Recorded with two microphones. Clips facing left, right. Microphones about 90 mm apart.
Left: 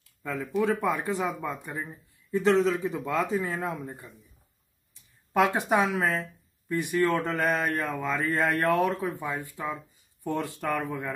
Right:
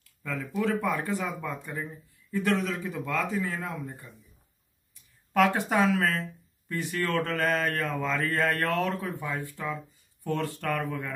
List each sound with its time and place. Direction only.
0.2 s speech: 20° left (ahead or behind)
5.3 s speech: 20° left (ahead or behind)